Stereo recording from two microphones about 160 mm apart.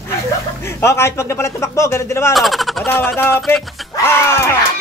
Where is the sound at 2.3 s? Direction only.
Centre (ahead or behind).